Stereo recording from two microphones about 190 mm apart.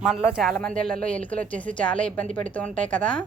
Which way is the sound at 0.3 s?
Centre (ahead or behind).